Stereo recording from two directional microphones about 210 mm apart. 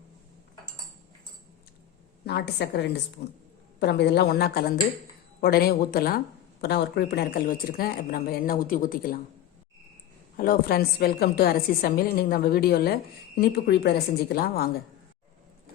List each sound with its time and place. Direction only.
2.2 s a woman's voice: 50° left (ahead or behind)
10.3 s a woman's voice: 45° left (ahead or behind)